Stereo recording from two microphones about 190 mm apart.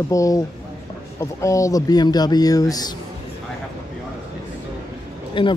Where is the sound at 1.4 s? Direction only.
15° left (ahead or behind).